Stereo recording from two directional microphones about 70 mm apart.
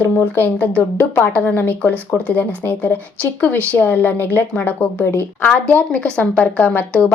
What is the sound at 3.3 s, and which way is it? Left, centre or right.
A woman's voice, left.